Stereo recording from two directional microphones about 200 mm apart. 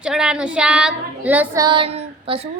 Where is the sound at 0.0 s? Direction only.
5° right (ahead or behind).